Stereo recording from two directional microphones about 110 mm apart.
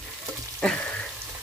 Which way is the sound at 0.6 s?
10° left (ahead or behind).